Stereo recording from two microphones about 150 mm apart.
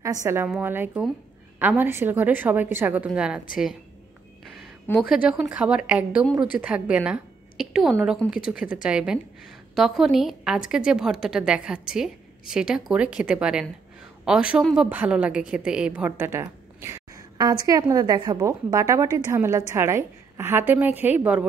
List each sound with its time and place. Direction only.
0.0 s a woman's voice: 20° right (ahead or behind)
5.1 s a woman's voice: 5° right (ahead or behind)